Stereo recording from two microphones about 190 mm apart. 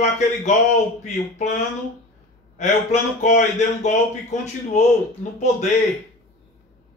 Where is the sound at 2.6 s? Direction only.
40° left (ahead or behind).